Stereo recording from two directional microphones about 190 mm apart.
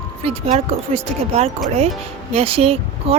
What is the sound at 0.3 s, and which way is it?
Speech, 35° right (ahead or behind).